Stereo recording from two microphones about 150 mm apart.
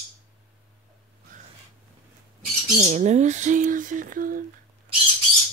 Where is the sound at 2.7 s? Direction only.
50° right (ahead or behind).